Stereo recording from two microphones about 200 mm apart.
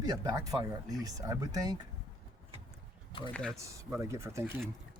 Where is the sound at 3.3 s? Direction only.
5° left (ahead or behind).